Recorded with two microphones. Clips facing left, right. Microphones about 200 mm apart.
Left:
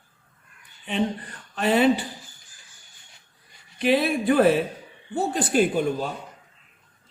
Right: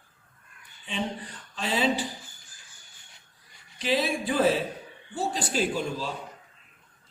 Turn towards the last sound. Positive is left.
turn(degrees=55)  # may be behind; listen again after turning